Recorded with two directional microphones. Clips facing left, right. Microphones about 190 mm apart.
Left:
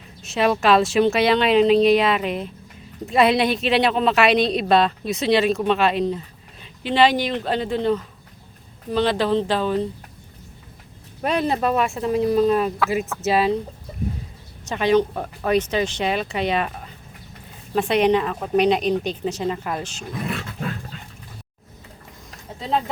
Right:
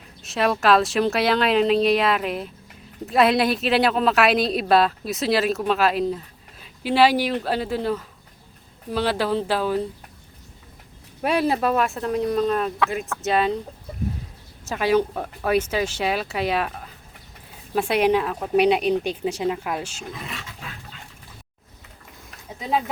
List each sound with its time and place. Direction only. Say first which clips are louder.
0.2 s a woman's voice: left 2 dB; centre (ahead or behind)
11.2 s a woman's voice: even; 5° right (ahead or behind)
14.6 s a woman's voice: left 2 dB; 5° right (ahead or behind)
20.2 s roar: left 9 dB; 55° left (ahead or behind)
22.4 s a sound: left 1 dB; 10° right (ahead or behind)